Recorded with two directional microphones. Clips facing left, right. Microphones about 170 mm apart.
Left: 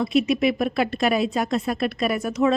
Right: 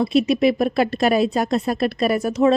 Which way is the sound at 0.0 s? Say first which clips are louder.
Right 3 dB; 35° right (ahead or behind).